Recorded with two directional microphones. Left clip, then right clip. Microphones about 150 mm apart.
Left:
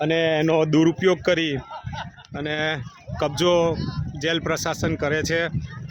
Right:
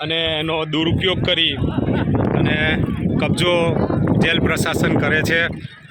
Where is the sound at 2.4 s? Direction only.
25° left (ahead or behind).